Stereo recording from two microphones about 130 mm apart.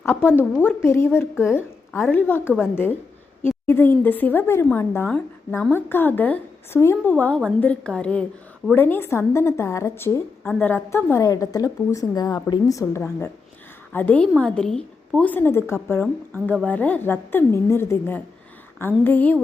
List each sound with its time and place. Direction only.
0.0 s a woman's voice: 15° left (ahead or behind)